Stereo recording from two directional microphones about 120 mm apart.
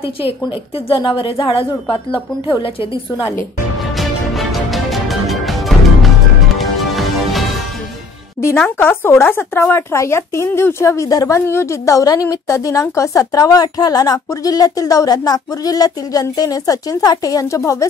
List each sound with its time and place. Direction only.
0.7 s a woman's voice: 50° left (ahead or behind)
3.9 s music: centre (ahead or behind)
8.4 s a woman's voice: 20° left (ahead or behind)